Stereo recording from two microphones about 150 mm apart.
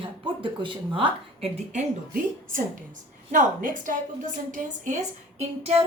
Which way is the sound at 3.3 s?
60° right (ahead or behind).